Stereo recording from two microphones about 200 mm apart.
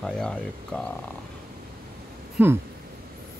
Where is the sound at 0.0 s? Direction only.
5° left (ahead or behind).